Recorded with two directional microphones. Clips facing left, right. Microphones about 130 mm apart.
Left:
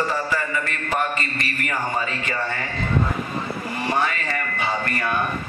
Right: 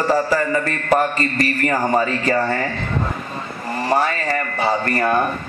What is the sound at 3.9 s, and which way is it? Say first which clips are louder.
Speech: right 5 dB; 40° right (ahead or behind).